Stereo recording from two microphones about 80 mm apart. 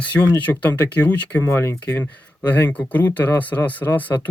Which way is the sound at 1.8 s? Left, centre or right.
Left.